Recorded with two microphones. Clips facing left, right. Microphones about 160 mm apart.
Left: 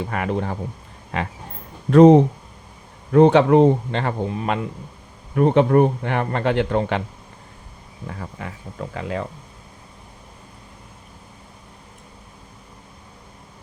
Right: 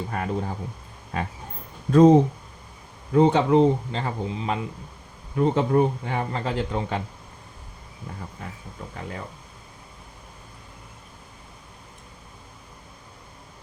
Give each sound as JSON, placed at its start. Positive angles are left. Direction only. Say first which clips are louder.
{"t": 0.0, "sound": "speech", "louder": "left 4 dB", "side_deg": 90}
{"t": 1.1, "sound": "speech", "louder": "left 3 dB", "side_deg": 90}
{"t": 1.9, "sound": "speech", "louder": "left 4 dB", "side_deg": 70}
{"t": 8.0, "sound": "speech", "louder": "left 5 dB", "side_deg": 85}